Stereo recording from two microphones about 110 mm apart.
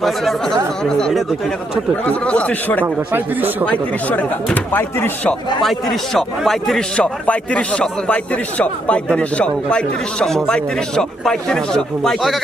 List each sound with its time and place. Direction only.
0.0 s a man's voice: 5° left (ahead or behind)
2.8 s speech: 20° right (ahead or behind)
3.7 s a man's voice: 15° left (ahead or behind)
5.6 s a man's voice: centre (ahead or behind)